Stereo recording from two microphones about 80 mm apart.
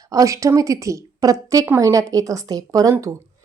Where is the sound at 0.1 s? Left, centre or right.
Right.